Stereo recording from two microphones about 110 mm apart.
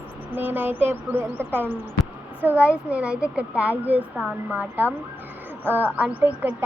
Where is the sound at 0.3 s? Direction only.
20° right (ahead or behind).